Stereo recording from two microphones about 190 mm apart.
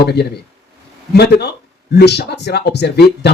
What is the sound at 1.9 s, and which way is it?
Speech, 60° left (ahead or behind).